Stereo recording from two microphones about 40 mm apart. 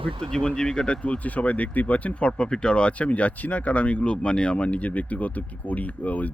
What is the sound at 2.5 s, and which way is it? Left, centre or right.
Speech, left.